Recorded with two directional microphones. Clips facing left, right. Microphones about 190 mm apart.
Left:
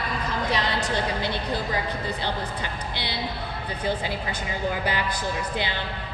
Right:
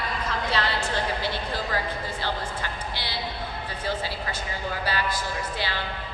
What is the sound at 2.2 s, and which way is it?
A woman's voice, 20° left (ahead or behind).